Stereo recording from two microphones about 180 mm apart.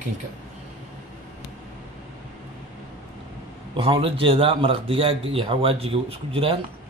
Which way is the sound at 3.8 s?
30° right (ahead or behind).